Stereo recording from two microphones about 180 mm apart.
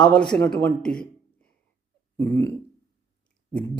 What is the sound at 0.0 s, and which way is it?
A man's voice, 5° left (ahead or behind).